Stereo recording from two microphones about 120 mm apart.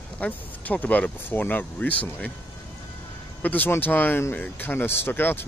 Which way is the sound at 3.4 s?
15° left (ahead or behind).